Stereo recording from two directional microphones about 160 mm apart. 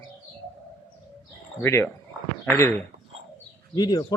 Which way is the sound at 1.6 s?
15° left (ahead or behind).